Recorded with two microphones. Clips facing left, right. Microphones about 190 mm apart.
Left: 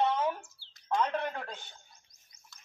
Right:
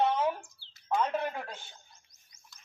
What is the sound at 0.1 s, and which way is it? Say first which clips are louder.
Bird: right 1 dB; 10° right (ahead or behind).